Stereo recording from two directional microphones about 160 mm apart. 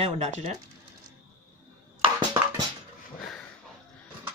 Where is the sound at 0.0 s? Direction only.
45° right (ahead or behind).